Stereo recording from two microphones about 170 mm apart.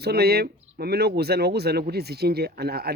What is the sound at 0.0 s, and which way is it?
Speech, 70° right (ahead or behind).